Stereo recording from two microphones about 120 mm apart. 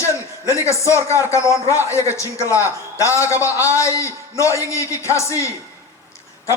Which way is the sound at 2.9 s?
25° left (ahead or behind).